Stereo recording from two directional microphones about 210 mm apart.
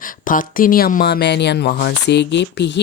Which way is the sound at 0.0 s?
40° left (ahead or behind).